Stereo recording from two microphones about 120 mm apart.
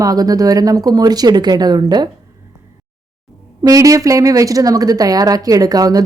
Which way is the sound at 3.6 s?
30° right (ahead or behind).